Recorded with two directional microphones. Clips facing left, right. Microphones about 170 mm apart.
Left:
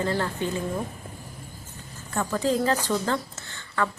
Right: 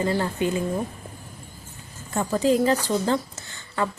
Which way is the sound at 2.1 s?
15° right (ahead or behind).